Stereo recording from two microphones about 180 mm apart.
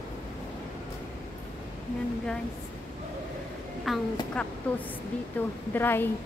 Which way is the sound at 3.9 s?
Centre (ahead or behind).